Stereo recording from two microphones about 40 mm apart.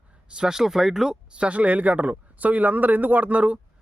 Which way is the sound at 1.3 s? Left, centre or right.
Right.